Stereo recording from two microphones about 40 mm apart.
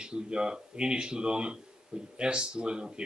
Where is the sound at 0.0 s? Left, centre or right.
Centre.